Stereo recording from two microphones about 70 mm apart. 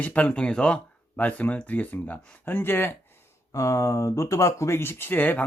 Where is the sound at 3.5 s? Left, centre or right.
Left.